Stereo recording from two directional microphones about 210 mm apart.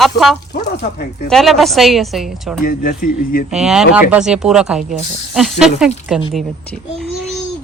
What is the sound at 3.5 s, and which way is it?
A child's voice, centre (ahead or behind).